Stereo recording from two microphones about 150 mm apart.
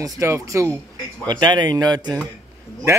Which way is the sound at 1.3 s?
30° right (ahead or behind).